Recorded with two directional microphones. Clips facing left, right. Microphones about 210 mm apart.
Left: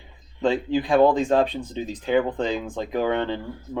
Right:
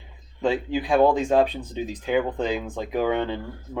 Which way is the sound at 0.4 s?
10° right (ahead or behind).